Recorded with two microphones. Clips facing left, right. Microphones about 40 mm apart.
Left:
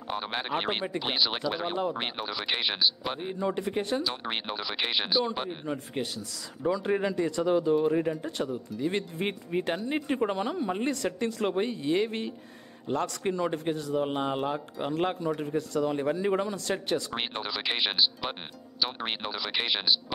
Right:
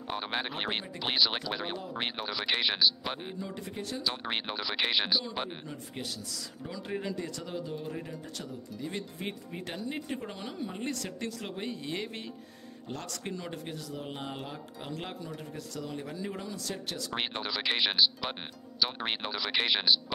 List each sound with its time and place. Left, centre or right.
0.1 s speech: centre
3.3 s speech: left
4.0 s speech: centre
6.0 s speech: left
6.6 s a man's voice: left
7.4 s speech: left
10.9 s a man's voice: centre
11.3 s speech: left
11.7 s a man's voice: centre
16.0 s speech: left
17.1 s speech: centre